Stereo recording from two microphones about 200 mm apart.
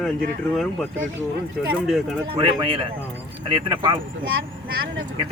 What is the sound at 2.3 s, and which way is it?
Speech, 25° right (ahead or behind).